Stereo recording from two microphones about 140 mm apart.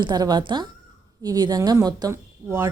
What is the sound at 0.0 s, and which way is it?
A woman's voice, 30° right (ahead or behind).